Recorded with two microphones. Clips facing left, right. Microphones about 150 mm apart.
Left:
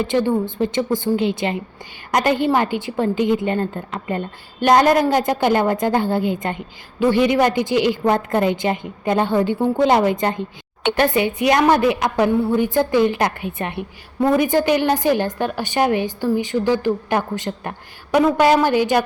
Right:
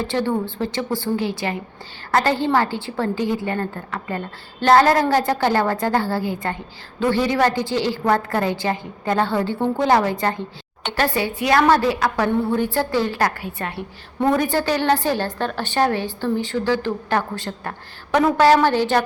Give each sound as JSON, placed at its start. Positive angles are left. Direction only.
{"t": 0.0, "sound": "a woman's voice", "side_deg": 15}